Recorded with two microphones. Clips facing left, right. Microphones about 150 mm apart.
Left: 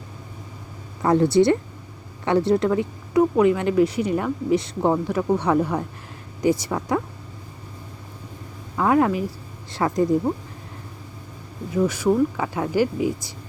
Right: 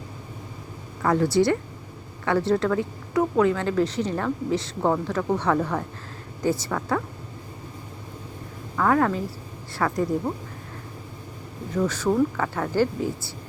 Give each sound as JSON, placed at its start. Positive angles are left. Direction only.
{"t": 1.0, "sound": "speech", "side_deg": 25}
{"t": 8.7, "sound": "speech", "side_deg": 15}
{"t": 11.7, "sound": "speech", "side_deg": 10}